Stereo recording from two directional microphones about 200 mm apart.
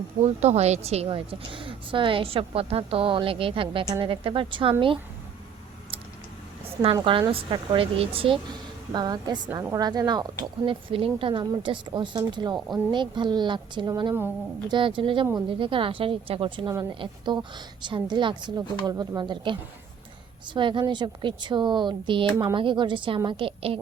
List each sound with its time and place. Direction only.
0.3 s a woman's voice: 35° right (ahead or behind)
7.0 s a woman's voice: 25° right (ahead or behind)